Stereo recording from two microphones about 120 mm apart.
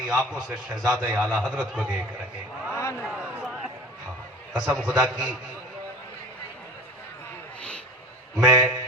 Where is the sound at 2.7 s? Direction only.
20° left (ahead or behind).